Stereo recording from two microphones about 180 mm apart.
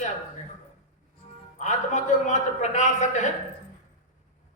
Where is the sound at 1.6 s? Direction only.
40° left (ahead or behind).